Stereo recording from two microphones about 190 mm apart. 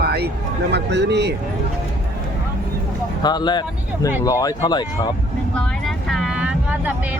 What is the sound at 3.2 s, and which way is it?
Speech, 20° left (ahead or behind).